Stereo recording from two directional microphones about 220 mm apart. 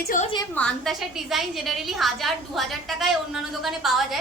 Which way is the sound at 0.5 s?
5° left (ahead or behind).